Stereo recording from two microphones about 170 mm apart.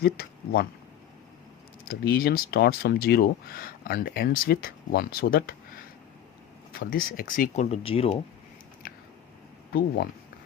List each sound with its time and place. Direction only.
0.0 s speech: 65° left (ahead or behind)
1.9 s speech: 65° left (ahead or behind)
6.7 s speech: 60° left (ahead or behind); by 8.2 s 35° left (ahead or behind)
8.8 s squish: 60° left (ahead or behind)